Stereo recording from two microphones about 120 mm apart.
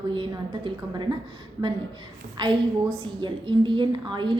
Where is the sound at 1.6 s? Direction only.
20° right (ahead or behind).